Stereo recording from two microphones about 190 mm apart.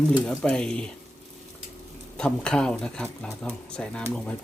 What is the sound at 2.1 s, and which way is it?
Speech, 5° left (ahead or behind).